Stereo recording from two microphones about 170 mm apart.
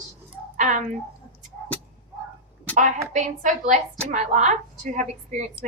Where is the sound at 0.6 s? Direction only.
45° right (ahead or behind).